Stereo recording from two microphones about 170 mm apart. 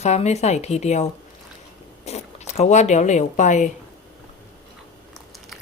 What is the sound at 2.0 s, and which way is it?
Speech, 40° left (ahead or behind).